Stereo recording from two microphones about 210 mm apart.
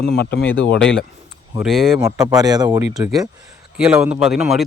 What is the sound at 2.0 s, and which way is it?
Speech, 15° right (ahead or behind).